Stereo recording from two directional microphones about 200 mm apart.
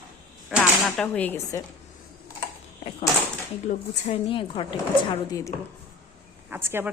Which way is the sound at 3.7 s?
30° left (ahead or behind).